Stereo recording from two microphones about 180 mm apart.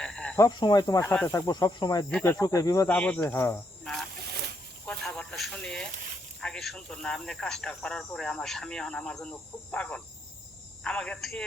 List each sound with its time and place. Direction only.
0.0 s frog: 5° left (ahead or behind)
0.3 s speech: 20° left (ahead or behind)
2.9 s speech: 10° left (ahead or behind)
4.9 s a sound: 5° left (ahead or behind)
6.4 s speech: centre (ahead or behind)